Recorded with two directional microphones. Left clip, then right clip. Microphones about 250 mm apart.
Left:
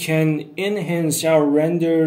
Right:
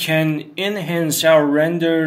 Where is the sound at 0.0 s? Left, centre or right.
Centre.